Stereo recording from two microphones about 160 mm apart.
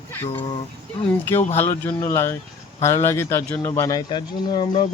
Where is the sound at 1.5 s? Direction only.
15° left (ahead or behind).